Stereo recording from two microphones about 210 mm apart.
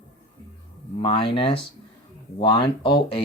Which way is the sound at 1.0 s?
25° left (ahead or behind).